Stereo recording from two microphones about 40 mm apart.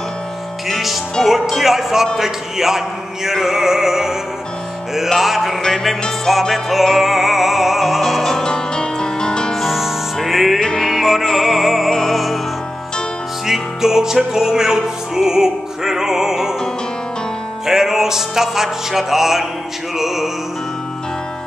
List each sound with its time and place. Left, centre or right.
0.7 s music: centre
5.1 s music: centre
5.6 s music: centre
8.5 s music: centre
9.6 s music: centre
10.6 s music: centre
10.9 s music: centre
11.9 s music: centre
13.5 s music: centre
17.6 s music: centre